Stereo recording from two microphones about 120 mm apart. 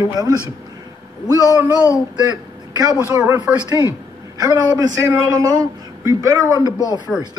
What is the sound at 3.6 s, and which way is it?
Speech, 30° left (ahead or behind).